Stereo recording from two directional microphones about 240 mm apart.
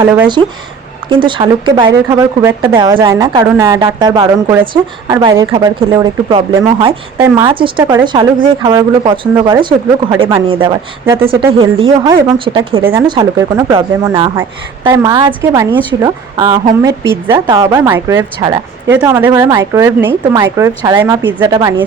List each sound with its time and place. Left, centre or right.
0.0 s a woman's voice: centre
1.1 s a woman's voice: centre
11.3 s a woman's voice: right